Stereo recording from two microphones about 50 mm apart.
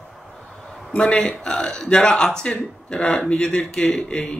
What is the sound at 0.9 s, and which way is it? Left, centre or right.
Speech, left.